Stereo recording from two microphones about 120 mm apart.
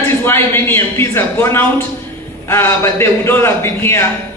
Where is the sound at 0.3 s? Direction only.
20° left (ahead or behind).